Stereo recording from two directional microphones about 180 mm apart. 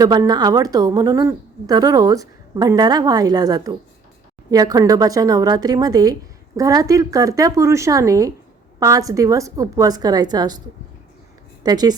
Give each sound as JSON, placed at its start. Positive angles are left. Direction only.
{"t": 0.0, "sound": "a woman's voice", "side_deg": -20}
{"t": 11.6, "sound": "a woman's voice", "side_deg": -20}